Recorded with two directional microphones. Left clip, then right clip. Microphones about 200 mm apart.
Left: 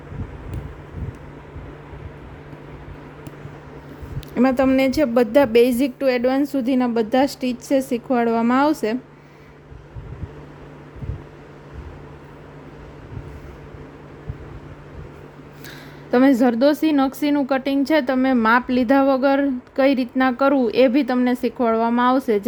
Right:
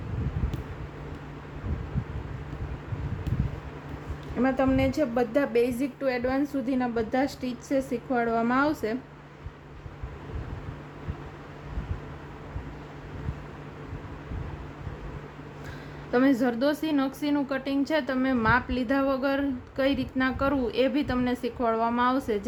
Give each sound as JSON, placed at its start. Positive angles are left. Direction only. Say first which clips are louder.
{"t": 4.4, "sound": "a woman's voice", "louder": "left 8 dB", "side_deg": 55}
{"t": 16.1, "sound": "a woman's voice", "louder": "left 8 dB", "side_deg": 40}